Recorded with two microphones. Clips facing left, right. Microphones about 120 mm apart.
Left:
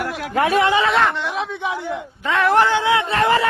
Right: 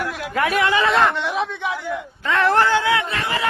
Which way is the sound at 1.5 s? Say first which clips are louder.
Left 1 dB; 20° left (ahead or behind).